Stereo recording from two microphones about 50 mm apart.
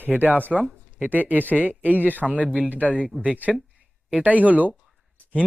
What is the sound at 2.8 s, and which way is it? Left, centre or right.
Speech, left.